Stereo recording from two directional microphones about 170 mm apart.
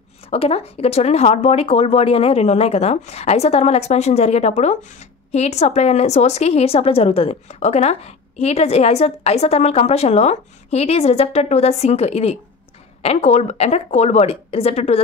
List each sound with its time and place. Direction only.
0.3 s speech: 35° left (ahead or behind)